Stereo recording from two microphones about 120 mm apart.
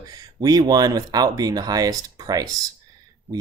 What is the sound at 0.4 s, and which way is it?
Speech, 30° right (ahead or behind).